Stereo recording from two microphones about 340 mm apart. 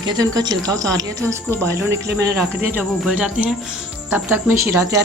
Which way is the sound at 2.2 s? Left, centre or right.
Centre.